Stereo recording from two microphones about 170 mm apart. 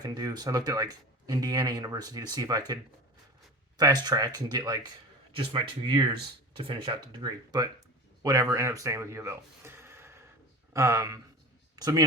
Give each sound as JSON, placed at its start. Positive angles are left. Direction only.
{"t": 0.0, "sound": "speech", "side_deg": -20}
{"t": 3.8, "sound": "speech", "side_deg": -25}